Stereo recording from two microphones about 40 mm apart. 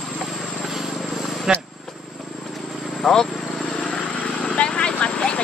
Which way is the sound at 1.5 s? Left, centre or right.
Centre.